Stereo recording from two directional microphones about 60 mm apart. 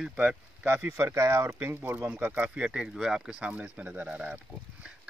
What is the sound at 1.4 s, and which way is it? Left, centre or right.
Speech, right.